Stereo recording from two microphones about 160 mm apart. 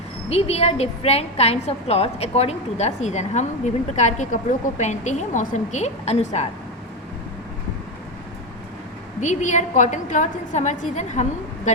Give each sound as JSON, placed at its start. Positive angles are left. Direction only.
{"t": 0.3, "sound": "a woman's voice", "side_deg": 40}
{"t": 9.2, "sound": "a woman's voice", "side_deg": 50}